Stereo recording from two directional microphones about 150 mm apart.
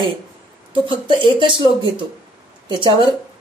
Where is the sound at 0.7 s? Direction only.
35° right (ahead or behind).